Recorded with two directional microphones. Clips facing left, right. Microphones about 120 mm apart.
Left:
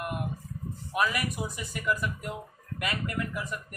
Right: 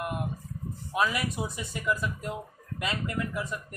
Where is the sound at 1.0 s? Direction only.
25° right (ahead or behind).